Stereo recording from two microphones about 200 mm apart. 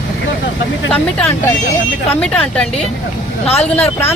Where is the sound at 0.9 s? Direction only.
5° left (ahead or behind).